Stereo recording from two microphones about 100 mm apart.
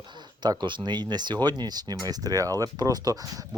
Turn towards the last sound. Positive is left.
turn(degrees=-40)  # may be behind; listen again after turning